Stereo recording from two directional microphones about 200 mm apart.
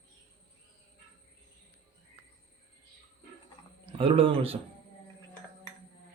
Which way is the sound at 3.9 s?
25° right (ahead or behind).